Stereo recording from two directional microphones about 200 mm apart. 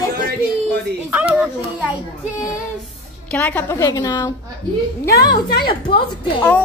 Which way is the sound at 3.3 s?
5° left (ahead or behind).